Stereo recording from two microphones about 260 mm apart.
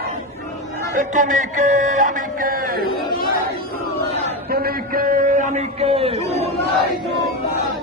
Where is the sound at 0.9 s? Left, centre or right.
Right.